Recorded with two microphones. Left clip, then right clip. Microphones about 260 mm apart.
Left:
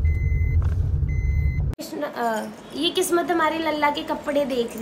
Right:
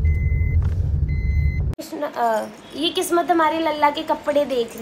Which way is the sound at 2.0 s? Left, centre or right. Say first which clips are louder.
Right 4 dB; centre.